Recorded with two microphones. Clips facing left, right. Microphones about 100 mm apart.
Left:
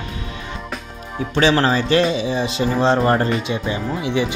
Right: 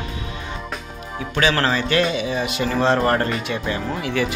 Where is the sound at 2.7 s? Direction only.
15° left (ahead or behind).